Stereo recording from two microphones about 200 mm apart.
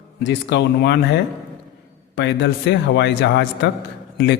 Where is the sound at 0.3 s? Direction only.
60° left (ahead or behind).